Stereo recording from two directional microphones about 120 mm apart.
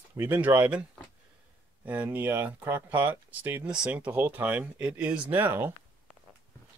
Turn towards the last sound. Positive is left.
turn(degrees=-15)  # may be behind; listen again after turning